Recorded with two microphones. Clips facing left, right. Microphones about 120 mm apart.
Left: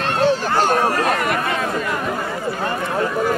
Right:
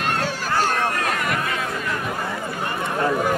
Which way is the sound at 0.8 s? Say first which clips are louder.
Left 5 dB; 30° left (ahead or behind).